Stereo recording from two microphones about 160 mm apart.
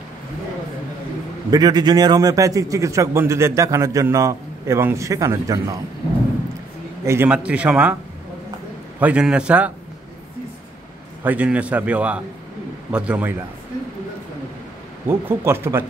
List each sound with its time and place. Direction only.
1.5 s a man's voice: 25° right (ahead or behind)
7.1 s a man's voice: 10° right (ahead or behind)
9.0 s a man's voice: 5° right (ahead or behind)
11.2 s a man's voice: 10° right (ahead or behind)
15.0 s a man's voice: 15° right (ahead or behind)